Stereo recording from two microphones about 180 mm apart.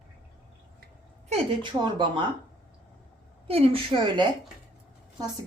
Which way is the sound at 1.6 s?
25° right (ahead or behind).